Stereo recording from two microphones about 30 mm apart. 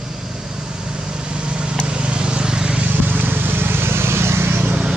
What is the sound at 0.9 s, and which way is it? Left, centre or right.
Vehicle, right.